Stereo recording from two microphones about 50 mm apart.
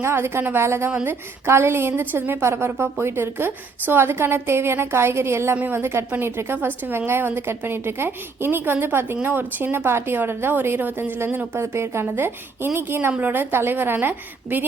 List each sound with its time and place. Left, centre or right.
0.0 s a woman's voice: right
9.7 s a woman's voice: right
11.6 s a woman's voice: right